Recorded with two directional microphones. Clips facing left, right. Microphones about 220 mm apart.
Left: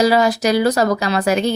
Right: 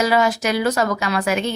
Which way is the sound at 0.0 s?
35° left (ahead or behind).